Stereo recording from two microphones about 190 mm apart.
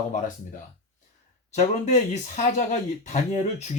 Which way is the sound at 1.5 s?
35° left (ahead or behind).